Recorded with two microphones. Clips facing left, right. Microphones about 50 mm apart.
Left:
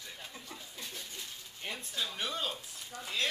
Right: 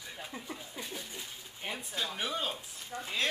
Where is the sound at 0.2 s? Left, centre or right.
Centre.